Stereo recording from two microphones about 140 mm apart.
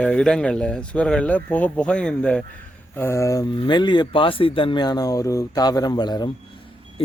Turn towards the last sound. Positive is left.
turn(degrees=30)  # may be behind; listen again after turning